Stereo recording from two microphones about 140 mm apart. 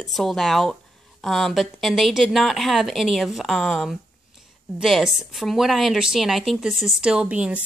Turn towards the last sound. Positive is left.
turn(degrees=-10)  # may be behind; listen again after turning